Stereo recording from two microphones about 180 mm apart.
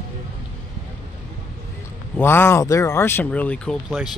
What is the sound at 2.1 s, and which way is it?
Speech, 10° left (ahead or behind).